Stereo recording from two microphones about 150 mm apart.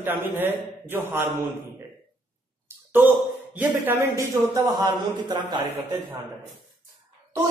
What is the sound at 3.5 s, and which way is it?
Speech, 15° right (ahead or behind).